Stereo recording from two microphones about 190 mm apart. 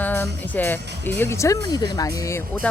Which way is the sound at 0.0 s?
10° left (ahead or behind).